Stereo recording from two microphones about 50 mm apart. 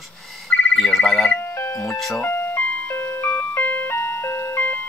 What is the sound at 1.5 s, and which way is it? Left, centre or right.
Music, left.